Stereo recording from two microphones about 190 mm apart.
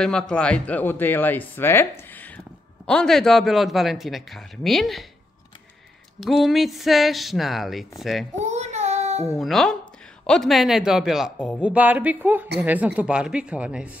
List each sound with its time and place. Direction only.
0.0 s a man's voice: 5° left (ahead or behind)
6.2 s a man's voice: centre (ahead or behind)
8.4 s child singing: 35° right (ahead or behind)
9.4 s a man's voice: centre (ahead or behind)